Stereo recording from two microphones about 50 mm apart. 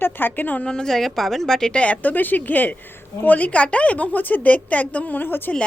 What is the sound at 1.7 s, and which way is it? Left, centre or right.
A woman's voice, left.